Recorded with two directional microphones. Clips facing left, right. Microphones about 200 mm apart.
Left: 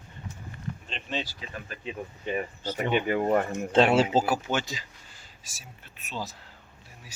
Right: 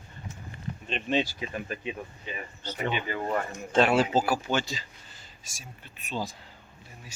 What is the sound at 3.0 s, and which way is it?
Speech, 55° left (ahead or behind).